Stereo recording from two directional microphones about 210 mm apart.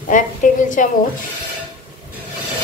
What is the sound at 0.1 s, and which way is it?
Speech, 40° left (ahead or behind).